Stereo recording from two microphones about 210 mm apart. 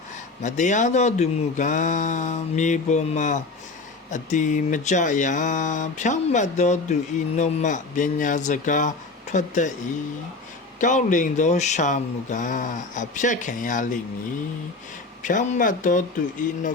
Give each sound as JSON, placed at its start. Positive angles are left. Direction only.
{"t": 0.4, "sound": "speech", "side_deg": 35}
{"t": 10.8, "sound": "speech", "side_deg": 35}
{"t": 15.2, "sound": "speech", "side_deg": 35}